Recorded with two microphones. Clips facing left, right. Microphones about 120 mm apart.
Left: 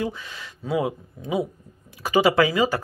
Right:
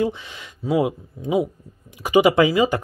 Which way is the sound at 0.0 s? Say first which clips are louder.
Right 5 dB; 20° right (ahead or behind).